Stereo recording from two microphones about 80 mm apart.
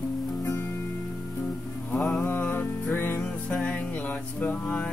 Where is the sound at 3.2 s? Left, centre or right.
Centre.